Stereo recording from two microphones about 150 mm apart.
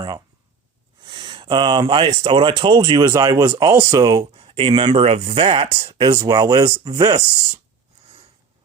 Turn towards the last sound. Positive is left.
turn(degrees=-25)  # may be behind; listen again after turning